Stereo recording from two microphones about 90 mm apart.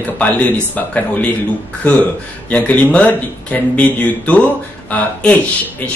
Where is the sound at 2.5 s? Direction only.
15° left (ahead or behind).